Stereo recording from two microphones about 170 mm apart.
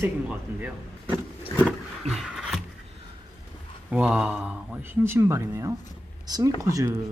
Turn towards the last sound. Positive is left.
turn(degrees=-15)  # may be behind; listen again after turning